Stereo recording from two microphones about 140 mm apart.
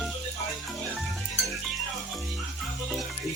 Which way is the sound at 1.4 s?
Centre (ahead or behind).